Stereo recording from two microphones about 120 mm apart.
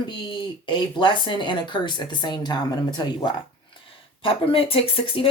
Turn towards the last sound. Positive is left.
turn(degrees=50)  # may be behind; listen again after turning